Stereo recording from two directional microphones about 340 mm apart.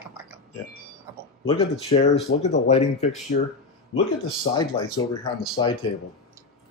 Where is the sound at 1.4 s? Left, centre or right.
Centre.